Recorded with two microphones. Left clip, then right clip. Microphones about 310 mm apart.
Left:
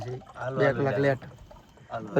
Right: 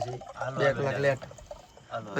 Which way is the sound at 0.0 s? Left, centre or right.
Centre.